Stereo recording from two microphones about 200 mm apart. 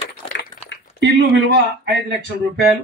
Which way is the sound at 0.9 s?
60° right (ahead or behind).